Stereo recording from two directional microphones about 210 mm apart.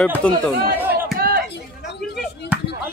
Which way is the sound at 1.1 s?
45° right (ahead or behind).